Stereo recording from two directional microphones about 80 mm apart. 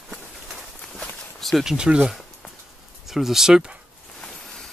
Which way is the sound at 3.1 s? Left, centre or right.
Centre.